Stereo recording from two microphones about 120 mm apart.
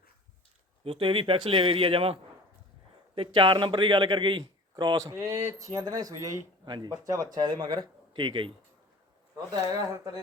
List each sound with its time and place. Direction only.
0.9 s speech: 50° right (ahead or behind)
3.2 s speech: 45° right (ahead or behind)
9.5 s speech: 30° right (ahead or behind)